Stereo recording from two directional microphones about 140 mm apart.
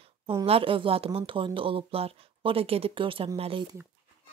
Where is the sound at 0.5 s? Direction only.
40° right (ahead or behind).